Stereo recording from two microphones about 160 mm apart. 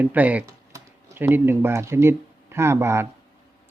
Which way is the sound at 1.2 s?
15° right (ahead or behind).